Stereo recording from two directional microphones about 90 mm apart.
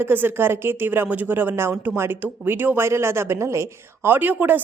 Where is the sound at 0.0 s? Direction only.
25° right (ahead or behind).